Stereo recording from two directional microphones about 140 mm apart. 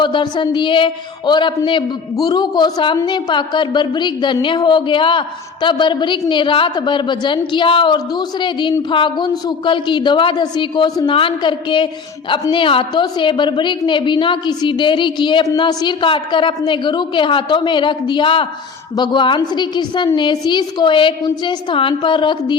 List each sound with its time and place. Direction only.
0.0 s a woman's voice: 35° left (ahead or behind)